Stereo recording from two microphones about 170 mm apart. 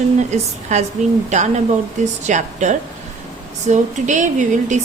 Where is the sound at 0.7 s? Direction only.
45° right (ahead or behind).